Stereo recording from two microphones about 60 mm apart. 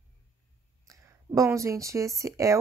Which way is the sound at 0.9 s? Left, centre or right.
Right.